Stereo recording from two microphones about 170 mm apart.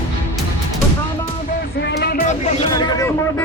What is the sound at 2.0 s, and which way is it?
Music, 65° left (ahead or behind).